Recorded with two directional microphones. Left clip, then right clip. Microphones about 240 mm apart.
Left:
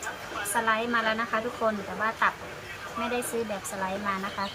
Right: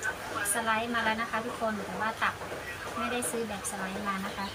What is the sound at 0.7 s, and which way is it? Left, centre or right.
Speech, centre.